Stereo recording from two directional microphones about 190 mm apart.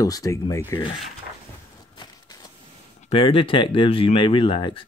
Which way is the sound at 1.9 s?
20° left (ahead or behind).